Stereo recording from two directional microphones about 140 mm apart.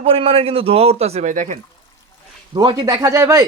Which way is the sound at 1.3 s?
70° right (ahead or behind).